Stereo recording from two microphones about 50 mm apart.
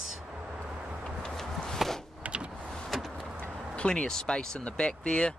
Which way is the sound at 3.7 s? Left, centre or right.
Centre.